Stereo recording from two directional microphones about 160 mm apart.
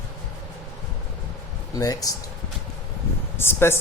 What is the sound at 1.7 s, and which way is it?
Speech, 20° left (ahead or behind).